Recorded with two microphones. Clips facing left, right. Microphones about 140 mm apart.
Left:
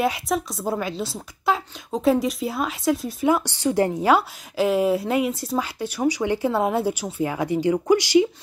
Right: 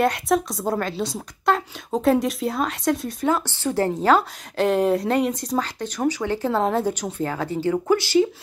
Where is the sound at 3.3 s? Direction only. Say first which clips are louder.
Left 2 dB; 15° left (ahead or behind).